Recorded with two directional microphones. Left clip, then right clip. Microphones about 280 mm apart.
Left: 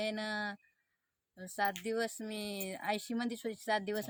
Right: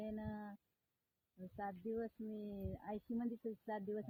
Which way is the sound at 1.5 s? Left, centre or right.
Centre.